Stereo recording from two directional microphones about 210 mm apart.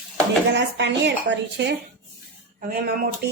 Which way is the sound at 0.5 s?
55° right (ahead or behind).